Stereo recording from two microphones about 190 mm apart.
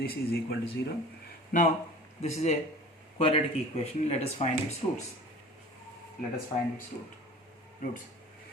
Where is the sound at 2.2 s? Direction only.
35° left (ahead or behind).